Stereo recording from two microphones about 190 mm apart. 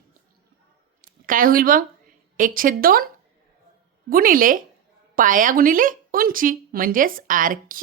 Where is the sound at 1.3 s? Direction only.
50° right (ahead or behind).